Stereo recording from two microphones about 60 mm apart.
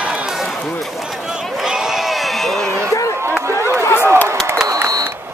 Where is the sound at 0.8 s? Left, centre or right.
Centre.